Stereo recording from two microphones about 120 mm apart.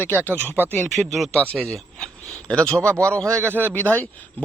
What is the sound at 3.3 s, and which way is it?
Speech, 20° right (ahead or behind).